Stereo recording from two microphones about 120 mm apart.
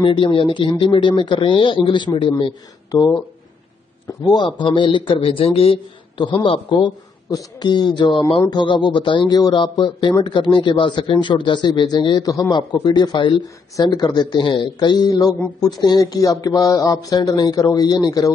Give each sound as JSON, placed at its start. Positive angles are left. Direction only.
{"t": 0.0, "sound": "speech", "side_deg": 45}